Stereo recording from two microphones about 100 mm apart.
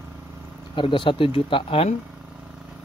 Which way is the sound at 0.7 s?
55° left (ahead or behind).